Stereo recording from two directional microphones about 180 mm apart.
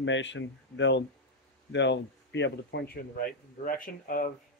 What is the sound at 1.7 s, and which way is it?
Speech, 80° left.